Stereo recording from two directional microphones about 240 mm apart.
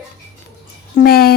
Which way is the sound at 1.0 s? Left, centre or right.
Left.